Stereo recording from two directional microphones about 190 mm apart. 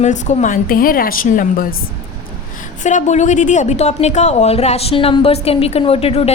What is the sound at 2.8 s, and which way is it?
Speech, 40° left (ahead or behind).